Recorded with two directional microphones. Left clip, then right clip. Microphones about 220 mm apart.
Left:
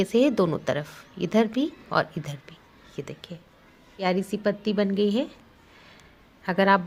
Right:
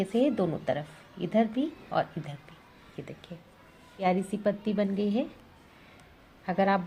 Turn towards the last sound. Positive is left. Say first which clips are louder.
# left 6 dB
turn(degrees=25)  # may be behind; listen again after turning